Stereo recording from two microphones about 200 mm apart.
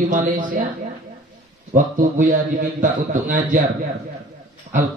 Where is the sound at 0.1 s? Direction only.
40° right (ahead or behind).